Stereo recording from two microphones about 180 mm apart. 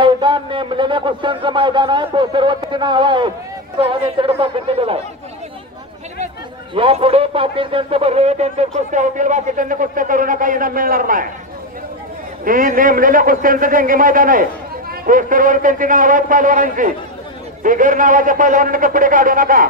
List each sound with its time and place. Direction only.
0.0 s a man's voice: 25° right (ahead or behind)
6.7 s speech: 30° right (ahead or behind); by 11.2 s 50° right (ahead or behind)
12.4 s speech: 50° right (ahead or behind)